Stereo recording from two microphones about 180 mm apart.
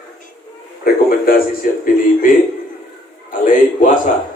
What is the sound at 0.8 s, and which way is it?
Speech, 55° left (ahead or behind).